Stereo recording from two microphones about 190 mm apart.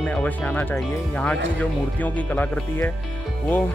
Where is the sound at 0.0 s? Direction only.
10° left (ahead or behind).